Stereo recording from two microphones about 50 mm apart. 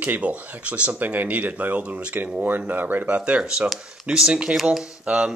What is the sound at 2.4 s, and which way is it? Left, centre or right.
Speech, right.